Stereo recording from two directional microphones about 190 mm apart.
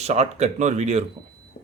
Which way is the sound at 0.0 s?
35° right (ahead or behind).